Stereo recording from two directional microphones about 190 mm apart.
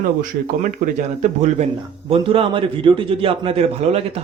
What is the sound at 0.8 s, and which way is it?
Speech, 50° right (ahead or behind).